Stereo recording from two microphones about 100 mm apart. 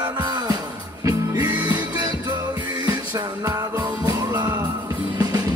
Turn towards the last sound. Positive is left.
turn(degrees=-40)  # may be behind; listen again after turning